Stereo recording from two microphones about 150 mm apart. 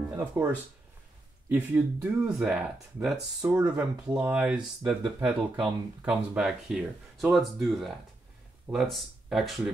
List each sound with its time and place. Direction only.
0.1 s speech: 15° right (ahead or behind)
1.5 s speech: 10° right (ahead or behind)